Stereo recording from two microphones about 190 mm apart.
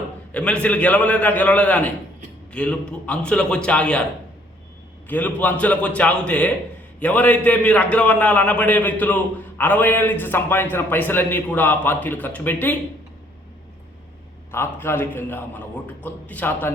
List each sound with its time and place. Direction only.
0.3 s a man's voice: 5° left (ahead or behind)
5.0 s a man's voice: 10° left (ahead or behind)
14.5 s a man's voice: 10° left (ahead or behind)